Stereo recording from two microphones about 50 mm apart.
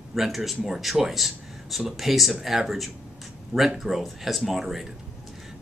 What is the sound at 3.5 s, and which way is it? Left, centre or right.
Speech, right.